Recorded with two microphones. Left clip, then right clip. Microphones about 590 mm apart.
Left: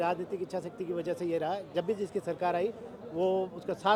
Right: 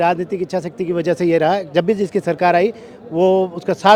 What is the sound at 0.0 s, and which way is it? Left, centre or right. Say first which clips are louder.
A man's voice: right 14 dB; right.